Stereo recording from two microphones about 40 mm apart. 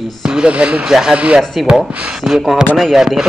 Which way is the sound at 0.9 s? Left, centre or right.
Centre.